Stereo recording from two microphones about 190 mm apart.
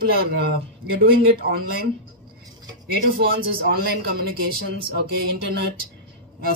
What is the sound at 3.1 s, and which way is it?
Speech, 50° right (ahead or behind).